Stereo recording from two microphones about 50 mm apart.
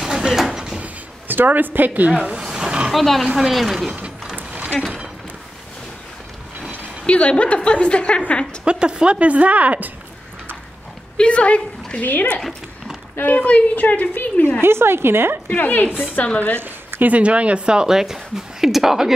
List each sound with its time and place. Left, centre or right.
0.0 s mechanisms: centre
0.5 s a sound: centre
1.2 s a woman's voice: right
2.5 s a sound: centre
2.9 s speech: centre
4.6 s a sound: centre
7.1 s a woman's voice: left
8.6 s a woman's voice: centre
11.1 s a woman's voice: left
14.6 s a woman's voice: right
15.5 s a woman's voice: left
16.6 s speech: right; by 19.1 s centre